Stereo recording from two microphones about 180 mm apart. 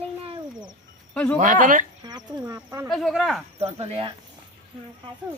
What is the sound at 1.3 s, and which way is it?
Speech, 45° right (ahead or behind).